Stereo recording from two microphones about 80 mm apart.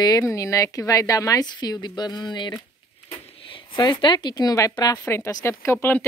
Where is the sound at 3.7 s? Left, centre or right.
Left.